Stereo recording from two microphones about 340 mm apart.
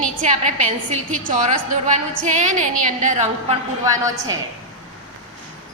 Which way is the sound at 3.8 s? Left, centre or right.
Centre.